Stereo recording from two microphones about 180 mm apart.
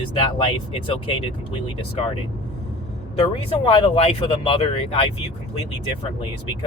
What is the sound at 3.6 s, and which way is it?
Speech, 30° left (ahead or behind).